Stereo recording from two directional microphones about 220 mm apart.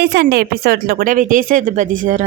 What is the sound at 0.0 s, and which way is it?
A woman's voice, 45° right (ahead or behind).